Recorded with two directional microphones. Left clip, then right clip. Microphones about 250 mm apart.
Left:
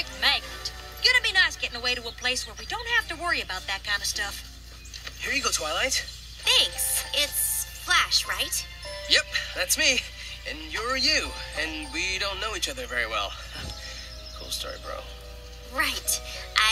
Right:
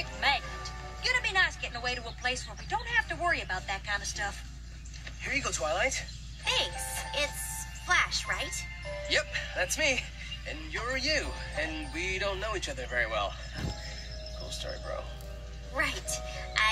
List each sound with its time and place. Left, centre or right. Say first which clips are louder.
0.0 s music: left 4 dB; left
5.2 s speech: left 5 dB; left
15.7 s music: left 5 dB; left